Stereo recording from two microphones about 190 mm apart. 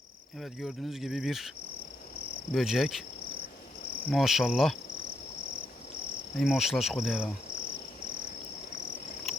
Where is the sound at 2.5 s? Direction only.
Centre (ahead or behind).